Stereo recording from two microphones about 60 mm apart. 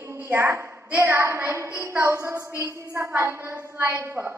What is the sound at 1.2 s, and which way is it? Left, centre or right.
A woman's voice, right.